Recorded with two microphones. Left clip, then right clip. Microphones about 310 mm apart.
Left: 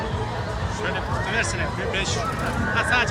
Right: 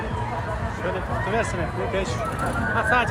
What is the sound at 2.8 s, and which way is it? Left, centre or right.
Speech, centre.